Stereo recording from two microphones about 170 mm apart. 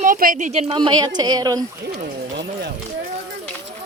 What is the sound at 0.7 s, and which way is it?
Speech, 25° right (ahead or behind).